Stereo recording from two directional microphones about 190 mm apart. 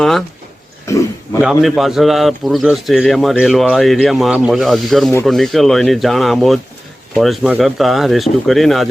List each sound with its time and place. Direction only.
0.0 s a man's voice: centre (ahead or behind)
0.9 s a sound: 15° left (ahead or behind)
1.4 s a man's voice: centre (ahead or behind)